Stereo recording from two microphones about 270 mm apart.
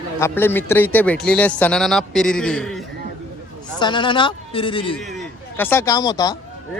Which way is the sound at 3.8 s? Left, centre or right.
Centre.